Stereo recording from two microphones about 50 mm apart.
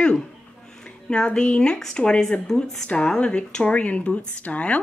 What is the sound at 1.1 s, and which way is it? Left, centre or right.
Speech, centre.